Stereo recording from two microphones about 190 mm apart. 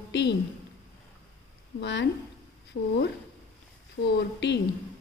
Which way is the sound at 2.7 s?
90° left.